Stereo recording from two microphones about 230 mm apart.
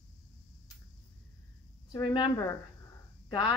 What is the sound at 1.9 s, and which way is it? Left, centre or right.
Speech, centre.